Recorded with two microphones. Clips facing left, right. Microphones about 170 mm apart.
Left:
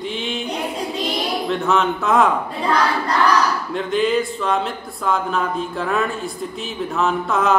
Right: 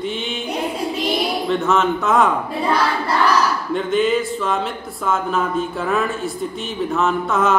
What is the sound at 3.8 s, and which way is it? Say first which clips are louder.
Speech: right 1 dB; centre (ahead or behind).